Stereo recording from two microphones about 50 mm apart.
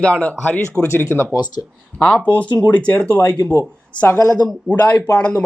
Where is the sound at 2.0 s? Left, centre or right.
Left.